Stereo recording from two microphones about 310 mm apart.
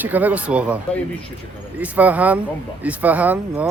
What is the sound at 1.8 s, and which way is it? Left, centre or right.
Speech, centre.